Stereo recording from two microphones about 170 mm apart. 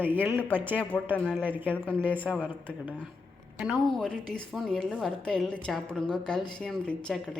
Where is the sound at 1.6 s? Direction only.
10° left (ahead or behind).